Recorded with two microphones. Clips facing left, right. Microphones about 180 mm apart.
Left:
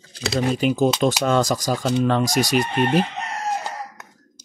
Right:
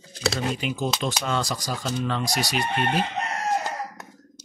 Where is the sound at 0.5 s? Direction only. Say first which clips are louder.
Left 9 dB; 40° left (ahead or behind).